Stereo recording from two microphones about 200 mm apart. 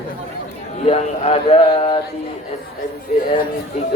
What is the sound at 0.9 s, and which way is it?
Speech, 30° left (ahead or behind).